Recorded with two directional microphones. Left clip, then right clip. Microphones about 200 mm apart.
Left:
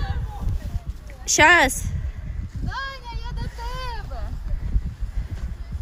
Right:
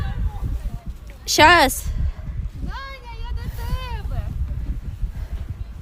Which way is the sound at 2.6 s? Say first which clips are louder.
Left 4 dB; 10° right (ahead or behind).